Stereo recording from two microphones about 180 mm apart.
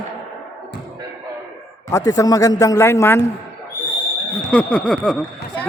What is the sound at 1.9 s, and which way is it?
A man's voice, 20° left (ahead or behind).